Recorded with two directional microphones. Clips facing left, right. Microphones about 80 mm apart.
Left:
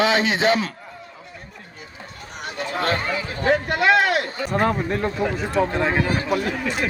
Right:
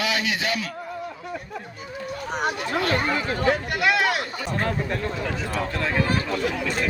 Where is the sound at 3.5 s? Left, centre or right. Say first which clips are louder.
Left 9 dB; left.